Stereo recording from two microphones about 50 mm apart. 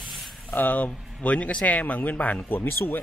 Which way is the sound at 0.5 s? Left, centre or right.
Left.